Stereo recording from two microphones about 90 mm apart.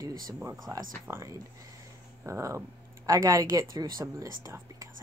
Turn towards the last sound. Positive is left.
turn(degrees=-35)  # may be behind; listen again after turning